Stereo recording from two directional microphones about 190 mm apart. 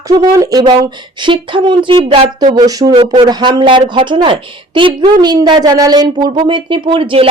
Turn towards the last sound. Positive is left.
turn(degrees=-30)  # may be behind; listen again after turning